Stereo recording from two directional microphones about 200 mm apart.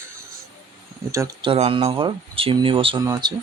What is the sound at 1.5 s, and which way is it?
Speech, 30° right (ahead or behind).